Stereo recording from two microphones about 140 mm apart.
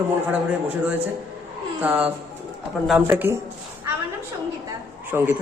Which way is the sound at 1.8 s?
10° right (ahead or behind).